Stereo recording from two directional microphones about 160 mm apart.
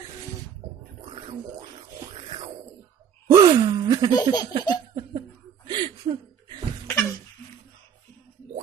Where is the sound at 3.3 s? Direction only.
20° right (ahead or behind).